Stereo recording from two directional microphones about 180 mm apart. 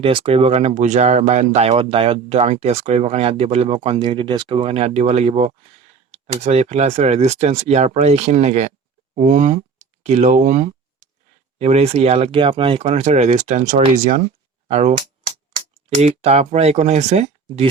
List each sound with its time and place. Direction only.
0.0 s speech: 30° right (ahead or behind)
9.1 s a sound: 45° right (ahead or behind)
11.6 s speech: 35° right (ahead or behind)
16.0 s speech: 35° right (ahead or behind)